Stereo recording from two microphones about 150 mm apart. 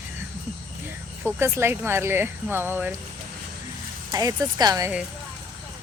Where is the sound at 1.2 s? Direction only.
15° right (ahead or behind).